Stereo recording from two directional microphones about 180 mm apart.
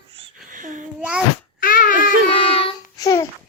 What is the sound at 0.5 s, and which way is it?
Babbling, 45° right (ahead or behind).